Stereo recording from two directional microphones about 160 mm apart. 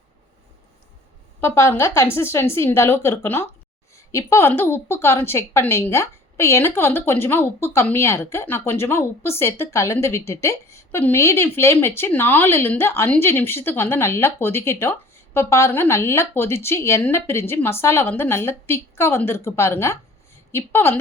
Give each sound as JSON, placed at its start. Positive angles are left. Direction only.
{"t": 1.4, "sound": "a woman's voice", "side_deg": 15}